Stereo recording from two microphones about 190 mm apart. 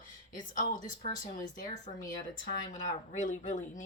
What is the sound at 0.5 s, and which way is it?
Speech, 45° left (ahead or behind).